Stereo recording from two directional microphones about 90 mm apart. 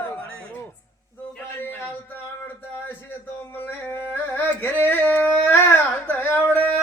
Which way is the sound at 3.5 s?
25° left (ahead or behind).